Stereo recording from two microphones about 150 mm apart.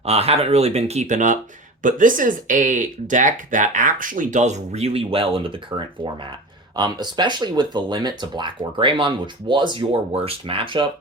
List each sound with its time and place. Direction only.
0.0 s speech: 45° right (ahead or behind)